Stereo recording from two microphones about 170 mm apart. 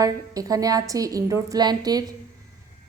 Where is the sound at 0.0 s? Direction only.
20° right (ahead or behind).